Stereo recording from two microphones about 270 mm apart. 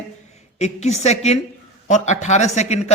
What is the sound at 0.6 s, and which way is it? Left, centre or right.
A man's voice, left.